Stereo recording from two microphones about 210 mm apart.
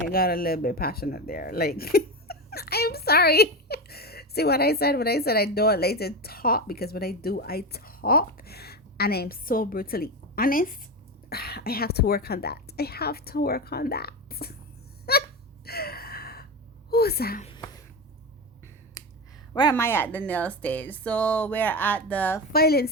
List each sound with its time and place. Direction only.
0.1 s speech: 45° left (ahead or behind)
15.1 s hiccup: 50° left (ahead or behind)
15.6 s gasp: 45° left (ahead or behind)
16.9 s a woman's voice: 50° left (ahead or behind)
17.4 s a sound: 20° left (ahead or behind)
19.7 s speech: 10° left (ahead or behind)
22.5 s speech: 50° left (ahead or behind)